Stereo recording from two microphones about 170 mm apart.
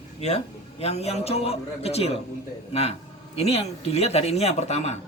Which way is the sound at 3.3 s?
35° left (ahead or behind).